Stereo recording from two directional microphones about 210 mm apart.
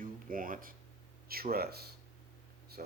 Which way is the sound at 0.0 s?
40° right (ahead or behind).